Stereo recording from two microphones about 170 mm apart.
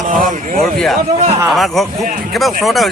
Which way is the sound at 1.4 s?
Centre (ahead or behind).